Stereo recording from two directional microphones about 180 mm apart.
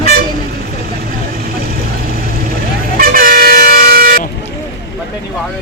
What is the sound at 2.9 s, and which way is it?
Vehicle, 55° right (ahead or behind).